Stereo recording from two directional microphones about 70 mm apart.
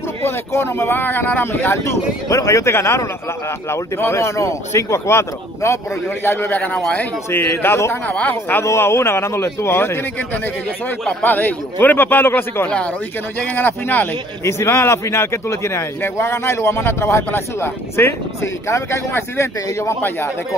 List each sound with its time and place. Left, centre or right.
0.2 s a man's voice: left
2.2 s a man's voice: left
8.1 s a man's voice: left
8.6 s a man's voice: left
11.2 s a man's voice: left
12.6 s a man's voice: centre
14.4 s a man's voice: left